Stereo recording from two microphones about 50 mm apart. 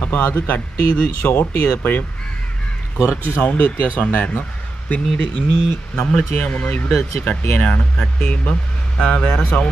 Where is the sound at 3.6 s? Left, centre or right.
Left.